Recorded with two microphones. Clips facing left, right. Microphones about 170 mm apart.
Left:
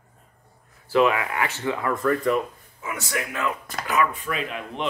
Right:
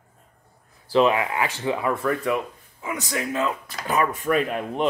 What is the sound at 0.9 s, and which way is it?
Speech, 20° right (ahead or behind).